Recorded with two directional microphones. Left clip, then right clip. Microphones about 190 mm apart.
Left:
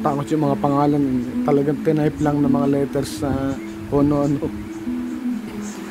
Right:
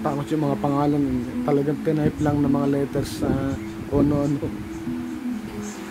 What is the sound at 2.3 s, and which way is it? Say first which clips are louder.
Speech: left 3 dB; centre (ahead or behind).